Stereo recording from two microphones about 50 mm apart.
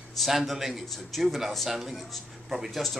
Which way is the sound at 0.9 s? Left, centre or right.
Centre.